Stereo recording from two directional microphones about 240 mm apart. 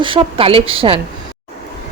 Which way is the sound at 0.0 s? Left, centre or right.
Right.